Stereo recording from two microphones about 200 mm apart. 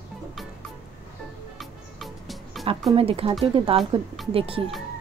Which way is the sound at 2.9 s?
30° right (ahead or behind).